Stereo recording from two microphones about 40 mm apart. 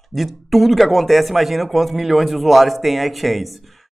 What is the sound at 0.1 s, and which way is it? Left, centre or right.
Speech, centre.